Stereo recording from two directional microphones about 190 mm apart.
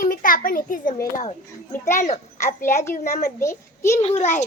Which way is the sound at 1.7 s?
15° left (ahead or behind).